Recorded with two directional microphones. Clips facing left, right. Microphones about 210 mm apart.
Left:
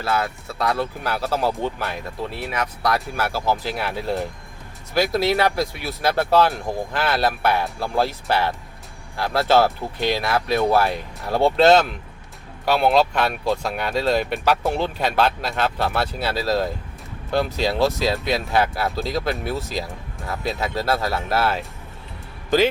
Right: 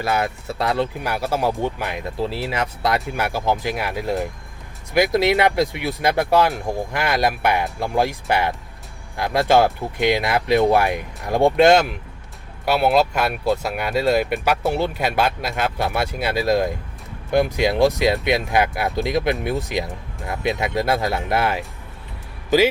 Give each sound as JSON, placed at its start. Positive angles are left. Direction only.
{"t": 0.0, "sound": "speech", "side_deg": -15}
{"t": 2.1, "sound": "speech", "side_deg": -30}